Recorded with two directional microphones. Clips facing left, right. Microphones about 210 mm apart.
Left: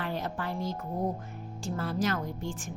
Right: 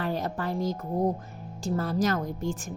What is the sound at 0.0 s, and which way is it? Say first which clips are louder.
A woman's voice: right 4 dB; 40° right (ahead or behind).